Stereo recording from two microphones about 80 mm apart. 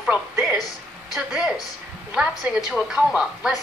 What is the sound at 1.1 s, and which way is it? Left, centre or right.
A woman's voice, centre.